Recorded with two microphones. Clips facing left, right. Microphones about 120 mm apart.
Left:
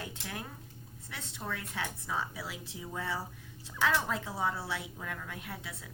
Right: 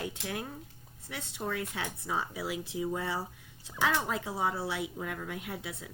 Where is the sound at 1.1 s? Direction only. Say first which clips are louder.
Right 5 dB; 15° right (ahead or behind).